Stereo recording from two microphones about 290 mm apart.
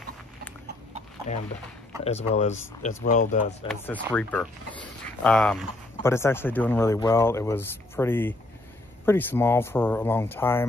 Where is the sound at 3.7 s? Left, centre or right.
Centre.